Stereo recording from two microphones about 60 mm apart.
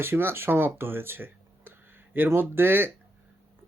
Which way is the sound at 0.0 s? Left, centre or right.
Right.